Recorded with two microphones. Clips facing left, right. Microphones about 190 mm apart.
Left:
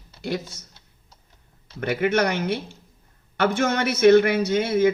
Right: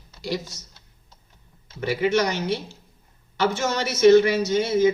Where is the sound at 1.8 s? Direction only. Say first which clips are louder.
Even; 55° left (ahead or behind).